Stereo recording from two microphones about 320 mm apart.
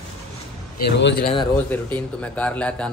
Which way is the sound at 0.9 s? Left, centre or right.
Left.